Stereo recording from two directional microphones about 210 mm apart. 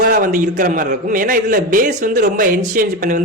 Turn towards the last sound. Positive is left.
turn(degrees=-40)  # may be behind; listen again after turning